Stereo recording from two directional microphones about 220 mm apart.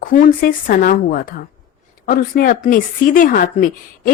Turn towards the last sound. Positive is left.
turn(degrees=40)  # may be behind; listen again after turning